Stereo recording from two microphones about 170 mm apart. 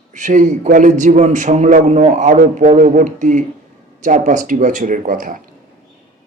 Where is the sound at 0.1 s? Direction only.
45° right (ahead or behind).